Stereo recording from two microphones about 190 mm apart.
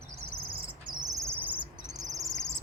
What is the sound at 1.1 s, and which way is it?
Cricket, 10° right (ahead or behind).